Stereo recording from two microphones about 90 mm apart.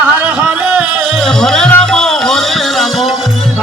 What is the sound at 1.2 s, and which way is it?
Music, 5° left (ahead or behind).